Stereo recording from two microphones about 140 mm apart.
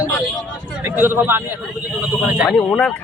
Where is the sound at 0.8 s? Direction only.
15° right (ahead or behind).